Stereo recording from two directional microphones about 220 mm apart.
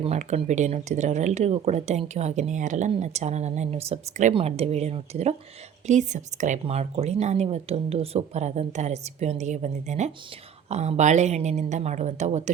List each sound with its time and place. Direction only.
0.0 s speech: 30° right (ahead or behind)